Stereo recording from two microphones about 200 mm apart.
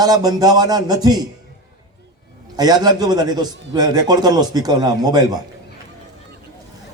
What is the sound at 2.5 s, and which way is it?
A man's voice, 20° right (ahead or behind).